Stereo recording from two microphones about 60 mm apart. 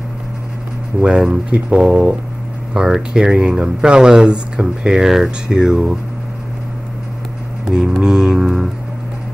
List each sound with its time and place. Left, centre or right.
1.0 s speech: centre
7.6 s mantra: centre
8.0 s speech: centre